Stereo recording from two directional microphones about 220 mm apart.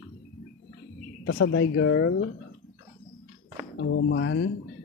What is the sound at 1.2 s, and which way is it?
Speech, 70° left (ahead or behind).